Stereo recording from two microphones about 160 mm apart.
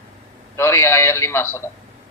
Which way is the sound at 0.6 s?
15° left (ahead or behind).